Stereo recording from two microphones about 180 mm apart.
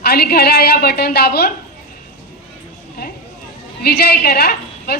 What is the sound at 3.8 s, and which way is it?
A woman's voice, 60° left (ahead or behind).